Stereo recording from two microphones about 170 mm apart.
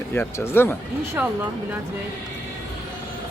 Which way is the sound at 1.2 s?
10° right (ahead or behind).